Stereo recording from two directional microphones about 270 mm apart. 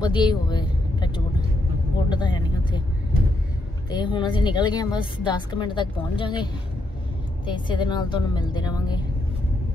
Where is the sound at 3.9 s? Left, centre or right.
Centre.